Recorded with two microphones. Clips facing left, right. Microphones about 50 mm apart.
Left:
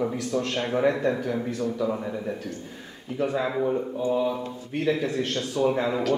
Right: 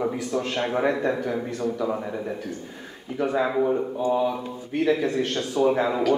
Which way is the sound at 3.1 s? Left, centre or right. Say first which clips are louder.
Right 3 dB; centre.